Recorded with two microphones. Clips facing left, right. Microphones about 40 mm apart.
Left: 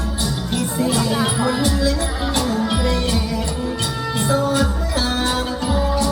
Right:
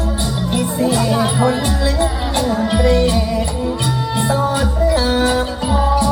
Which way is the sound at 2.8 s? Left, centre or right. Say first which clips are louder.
Right 6 dB; centre.